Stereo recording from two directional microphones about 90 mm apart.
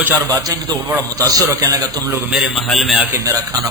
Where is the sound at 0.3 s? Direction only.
45° right (ahead or behind).